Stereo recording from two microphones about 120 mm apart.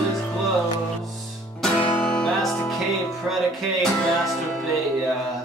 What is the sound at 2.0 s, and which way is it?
Music, 5° left (ahead or behind).